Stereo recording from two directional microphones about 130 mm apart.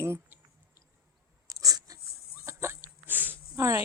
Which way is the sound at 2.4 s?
20° right (ahead or behind).